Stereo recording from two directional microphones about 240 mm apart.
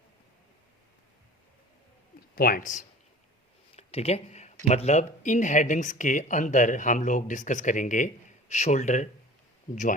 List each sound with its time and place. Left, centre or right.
2.3 s speech: left